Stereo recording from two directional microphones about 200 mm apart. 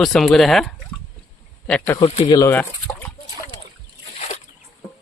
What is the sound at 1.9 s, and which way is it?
Speech, 25° left (ahead or behind).